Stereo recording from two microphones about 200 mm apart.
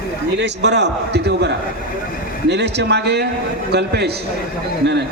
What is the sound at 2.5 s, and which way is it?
A man's voice, 60° right (ahead or behind).